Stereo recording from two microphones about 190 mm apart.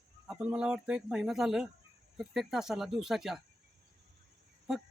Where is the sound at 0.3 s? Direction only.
5° right (ahead or behind).